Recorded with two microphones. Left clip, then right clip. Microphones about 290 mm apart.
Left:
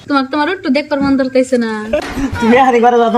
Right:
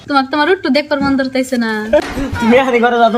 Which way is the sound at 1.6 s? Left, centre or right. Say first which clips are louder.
Right 2 dB; centre.